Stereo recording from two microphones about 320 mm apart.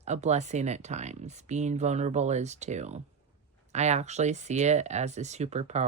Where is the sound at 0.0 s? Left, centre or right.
Right.